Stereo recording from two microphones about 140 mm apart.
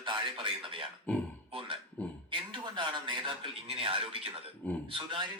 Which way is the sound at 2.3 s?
35° right (ahead or behind).